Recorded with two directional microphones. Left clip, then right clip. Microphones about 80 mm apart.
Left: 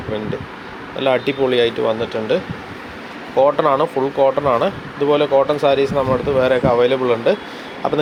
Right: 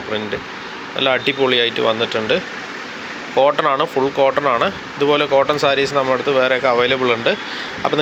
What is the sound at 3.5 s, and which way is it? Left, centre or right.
Speech, centre.